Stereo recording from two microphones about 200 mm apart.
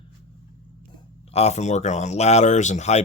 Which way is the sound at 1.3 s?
35° left (ahead or behind).